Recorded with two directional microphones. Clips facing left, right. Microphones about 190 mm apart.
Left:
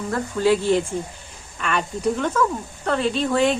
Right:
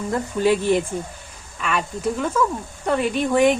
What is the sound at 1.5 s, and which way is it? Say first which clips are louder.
Speech: even; centre (ahead or behind).